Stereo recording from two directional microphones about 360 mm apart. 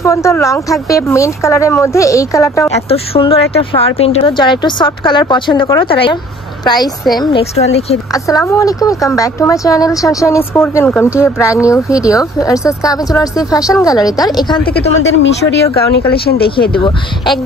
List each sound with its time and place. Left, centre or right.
0.0 s a woman's voice: centre
14.6 s speech: left
16.7 s speech: centre